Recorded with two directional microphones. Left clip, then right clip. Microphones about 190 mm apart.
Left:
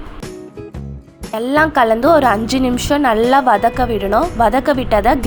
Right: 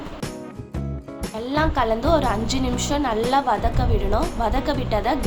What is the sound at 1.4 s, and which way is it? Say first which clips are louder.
A woman's voice: left 9 dB; 40° left (ahead or behind).